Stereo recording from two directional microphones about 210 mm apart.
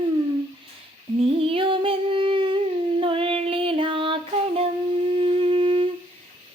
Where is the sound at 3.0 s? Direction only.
25° right (ahead or behind).